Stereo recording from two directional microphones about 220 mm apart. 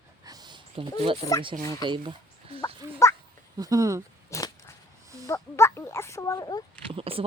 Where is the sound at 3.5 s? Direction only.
15° right (ahead or behind).